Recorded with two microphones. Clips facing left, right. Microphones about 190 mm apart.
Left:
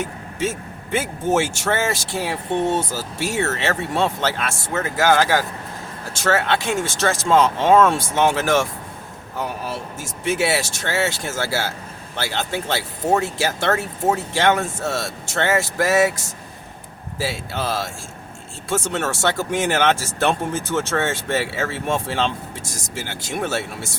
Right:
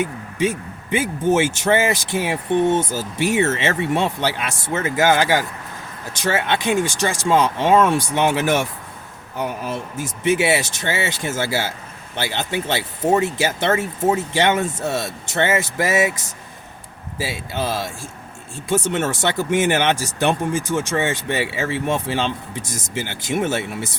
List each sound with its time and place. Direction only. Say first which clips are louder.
0.0 s vehicle: right 4 dB; 15° right (ahead or behind)
1.3 s speech: right 3 dB; 20° right (ahead or behind)
9.6 s speech: right 3 dB; 20° right (ahead or behind)